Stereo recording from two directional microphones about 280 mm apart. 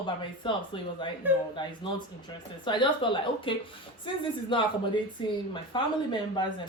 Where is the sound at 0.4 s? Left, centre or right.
Centre.